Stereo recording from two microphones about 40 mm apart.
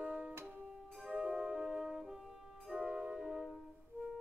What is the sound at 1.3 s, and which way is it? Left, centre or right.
Music, centre.